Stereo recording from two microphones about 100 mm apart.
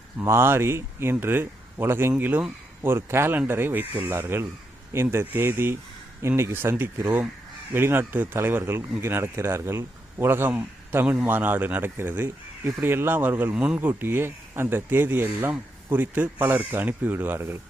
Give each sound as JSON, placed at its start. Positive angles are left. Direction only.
{"t": 0.2, "sound": "speech", "side_deg": -25}